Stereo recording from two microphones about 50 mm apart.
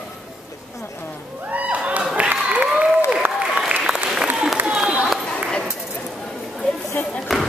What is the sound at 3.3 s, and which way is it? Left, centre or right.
Applause, centre.